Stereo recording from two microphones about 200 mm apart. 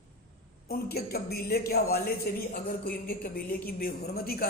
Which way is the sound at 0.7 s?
50° left (ahead or behind).